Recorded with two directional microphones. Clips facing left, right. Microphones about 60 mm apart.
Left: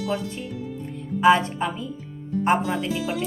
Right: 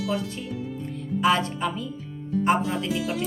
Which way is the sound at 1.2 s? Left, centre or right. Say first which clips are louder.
Left 5 dB; centre.